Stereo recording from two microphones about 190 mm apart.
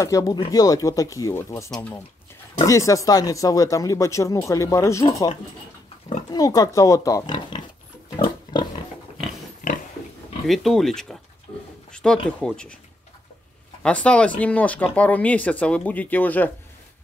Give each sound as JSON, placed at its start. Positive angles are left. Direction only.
{"t": 0.0, "sound": "speech", "side_deg": 15}
{"t": 5.0, "sound": "speech", "side_deg": 25}
{"t": 9.6, "sound": "pig", "side_deg": 45}
{"t": 10.4, "sound": "speech", "side_deg": 0}
{"t": 11.9, "sound": "a sound", "side_deg": 5}
{"t": 12.3, "sound": "speech", "side_deg": 5}
{"t": 13.8, "sound": "speech", "side_deg": 5}